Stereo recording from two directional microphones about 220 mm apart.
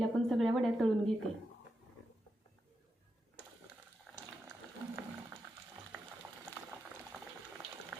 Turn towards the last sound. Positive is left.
turn(degrees=0)  # may be behind; listen again after turning